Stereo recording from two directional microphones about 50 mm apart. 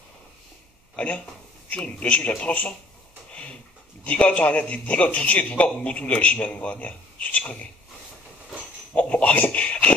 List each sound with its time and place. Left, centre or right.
0.9 s a man's voice: left
4.0 s a man's voice: left
8.9 s a sound: left